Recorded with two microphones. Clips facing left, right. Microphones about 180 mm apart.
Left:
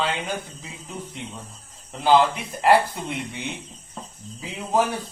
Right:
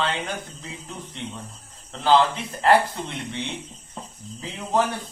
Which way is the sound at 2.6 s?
10° left (ahead or behind).